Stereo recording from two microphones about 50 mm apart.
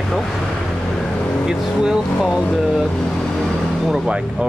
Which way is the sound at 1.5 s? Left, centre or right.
Centre.